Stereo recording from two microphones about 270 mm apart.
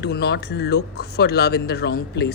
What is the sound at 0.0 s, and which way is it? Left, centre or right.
Speech, left.